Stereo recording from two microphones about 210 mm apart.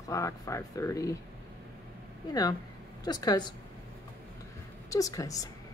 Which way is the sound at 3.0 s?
20° left (ahead or behind).